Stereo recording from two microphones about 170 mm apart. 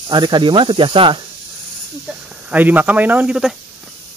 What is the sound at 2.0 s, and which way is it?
Speech, 10° right (ahead or behind).